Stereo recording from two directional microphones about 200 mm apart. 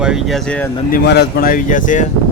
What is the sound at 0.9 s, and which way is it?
Speech, 50° left (ahead or behind).